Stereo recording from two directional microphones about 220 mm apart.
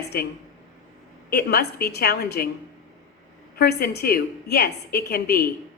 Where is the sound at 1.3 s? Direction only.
45° left (ahead or behind).